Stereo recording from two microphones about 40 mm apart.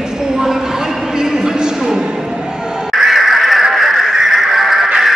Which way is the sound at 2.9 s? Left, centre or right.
Centre.